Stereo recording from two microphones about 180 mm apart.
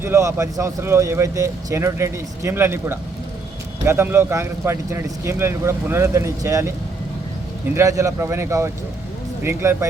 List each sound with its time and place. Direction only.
0.0 s speech: 15° right (ahead or behind)
7.8 s speech: 20° right (ahead or behind)